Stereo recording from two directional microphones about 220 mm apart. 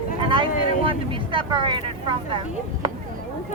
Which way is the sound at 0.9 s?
25° right (ahead or behind).